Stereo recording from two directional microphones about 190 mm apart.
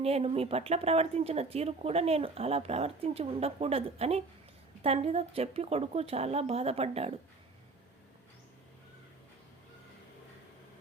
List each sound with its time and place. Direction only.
0.0 s speech: 30° right (ahead or behind)